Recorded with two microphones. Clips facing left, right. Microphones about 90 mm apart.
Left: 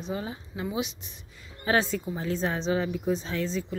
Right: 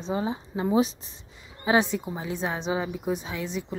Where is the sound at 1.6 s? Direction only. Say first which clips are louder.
Right 2 dB; 15° right (ahead or behind).